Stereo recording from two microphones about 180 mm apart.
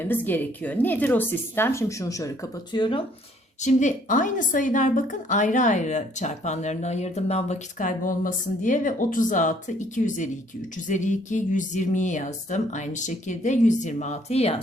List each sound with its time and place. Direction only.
0.0 s a woman's voice: 10° left (ahead or behind); by 3.0 s 25° left (ahead or behind)
3.6 s a woman's voice: 40° left (ahead or behind)